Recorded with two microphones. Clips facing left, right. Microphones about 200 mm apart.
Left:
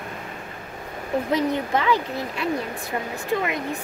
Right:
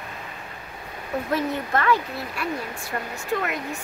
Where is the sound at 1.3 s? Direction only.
15° left (ahead or behind).